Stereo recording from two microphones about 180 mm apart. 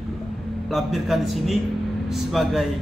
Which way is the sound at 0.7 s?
Centre (ahead or behind).